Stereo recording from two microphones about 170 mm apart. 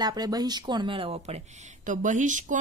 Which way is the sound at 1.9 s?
50° right (ahead or behind).